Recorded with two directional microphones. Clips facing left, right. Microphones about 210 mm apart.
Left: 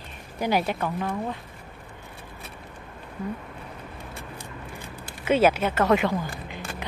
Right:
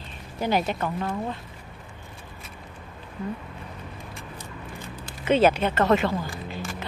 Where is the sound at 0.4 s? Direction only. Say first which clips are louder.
Even; 10° left (ahead or behind).